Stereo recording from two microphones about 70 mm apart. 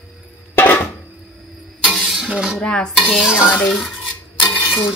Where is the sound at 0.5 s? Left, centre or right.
Left.